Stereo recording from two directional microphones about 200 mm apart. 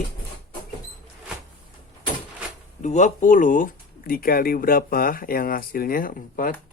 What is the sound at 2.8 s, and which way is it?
Speech, 35° left (ahead or behind).